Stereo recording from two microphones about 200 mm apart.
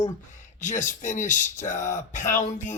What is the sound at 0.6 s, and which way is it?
Speech, 40° left (ahead or behind).